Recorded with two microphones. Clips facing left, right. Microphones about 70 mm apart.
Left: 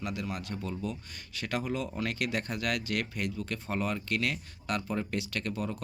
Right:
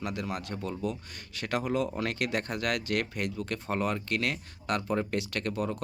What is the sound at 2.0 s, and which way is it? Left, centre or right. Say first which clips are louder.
Speech: right 2 dB; right.